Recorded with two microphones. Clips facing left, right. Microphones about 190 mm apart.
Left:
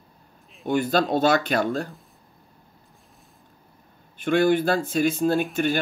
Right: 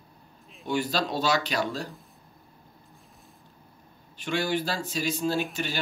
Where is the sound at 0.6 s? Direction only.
55° left (ahead or behind).